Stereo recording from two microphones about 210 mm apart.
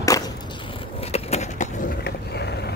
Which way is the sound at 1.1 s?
30° left (ahead or behind).